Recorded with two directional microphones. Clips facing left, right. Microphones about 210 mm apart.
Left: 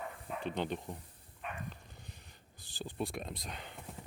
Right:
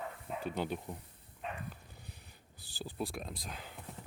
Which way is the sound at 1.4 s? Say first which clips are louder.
Right 2 dB; 30° right (ahead or behind).